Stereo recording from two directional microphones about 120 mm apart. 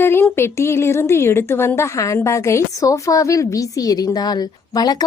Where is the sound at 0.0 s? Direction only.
20° left (ahead or behind).